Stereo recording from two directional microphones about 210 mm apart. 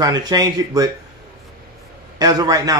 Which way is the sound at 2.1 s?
20° right (ahead or behind).